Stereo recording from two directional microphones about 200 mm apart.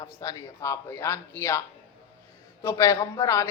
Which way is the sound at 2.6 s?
15° left (ahead or behind).